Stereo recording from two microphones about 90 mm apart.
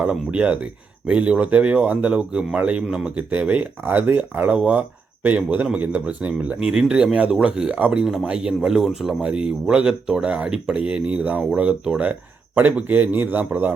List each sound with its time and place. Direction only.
0.0 s a man's voice: 10° right (ahead or behind)